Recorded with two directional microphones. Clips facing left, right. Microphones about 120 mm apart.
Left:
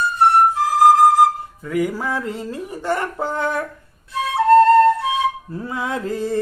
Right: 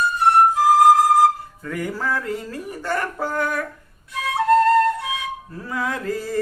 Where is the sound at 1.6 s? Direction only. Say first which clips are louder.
Left 4 dB; 10° left (ahead or behind).